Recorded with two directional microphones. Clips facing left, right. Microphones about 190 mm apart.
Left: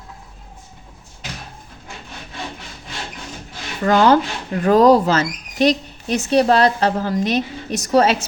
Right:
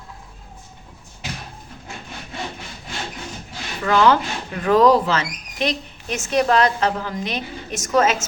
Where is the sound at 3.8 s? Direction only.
40° left (ahead or behind).